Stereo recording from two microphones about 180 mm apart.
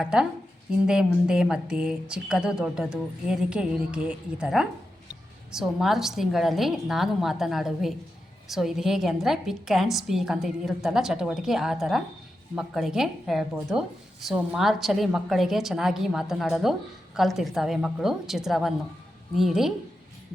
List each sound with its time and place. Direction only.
0.0 s speech: 5° right (ahead or behind)